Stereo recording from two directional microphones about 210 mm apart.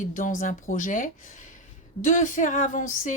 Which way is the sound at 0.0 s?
40° left (ahead or behind).